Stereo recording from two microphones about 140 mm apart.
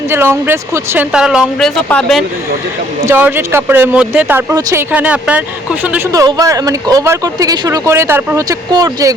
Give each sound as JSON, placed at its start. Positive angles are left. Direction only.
{"t": 0.1, "sound": "speech", "side_deg": -15}
{"t": 1.1, "sound": "speech", "side_deg": -5}
{"t": 3.1, "sound": "speech", "side_deg": -15}
{"t": 6.1, "sound": "speech", "side_deg": -25}